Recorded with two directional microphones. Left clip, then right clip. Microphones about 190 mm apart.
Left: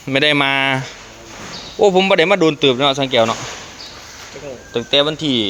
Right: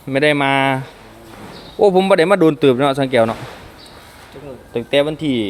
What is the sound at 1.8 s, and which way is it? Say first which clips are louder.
A man's voice: even; 20° right (ahead or behind).